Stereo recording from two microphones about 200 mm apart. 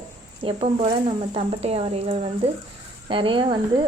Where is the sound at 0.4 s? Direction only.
30° right (ahead or behind).